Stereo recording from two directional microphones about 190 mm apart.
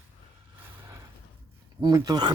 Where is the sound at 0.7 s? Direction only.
15° right (ahead or behind).